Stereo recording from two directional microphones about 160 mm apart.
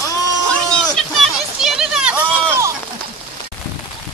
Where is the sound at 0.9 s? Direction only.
Centre (ahead or behind).